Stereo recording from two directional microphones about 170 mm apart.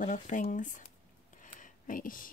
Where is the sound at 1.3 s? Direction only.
50° left (ahead or behind).